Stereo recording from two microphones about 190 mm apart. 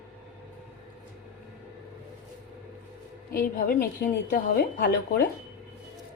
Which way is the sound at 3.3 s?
50° left (ahead or behind).